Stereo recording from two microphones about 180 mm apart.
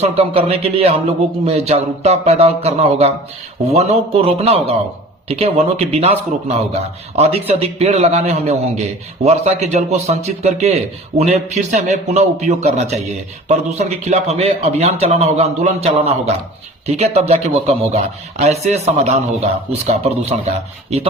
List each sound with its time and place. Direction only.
0.0 s a man's voice: 35° right (ahead or behind)